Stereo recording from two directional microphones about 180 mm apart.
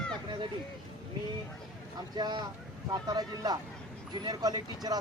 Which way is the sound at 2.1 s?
25° right (ahead or behind).